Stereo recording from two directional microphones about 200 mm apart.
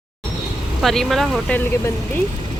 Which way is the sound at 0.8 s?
Centre (ahead or behind).